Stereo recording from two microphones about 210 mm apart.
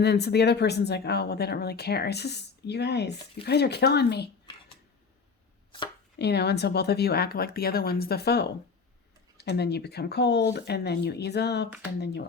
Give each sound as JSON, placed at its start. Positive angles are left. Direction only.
{"t": 0.0, "sound": "speech", "side_deg": 50}
{"t": 6.1, "sound": "speech", "side_deg": 50}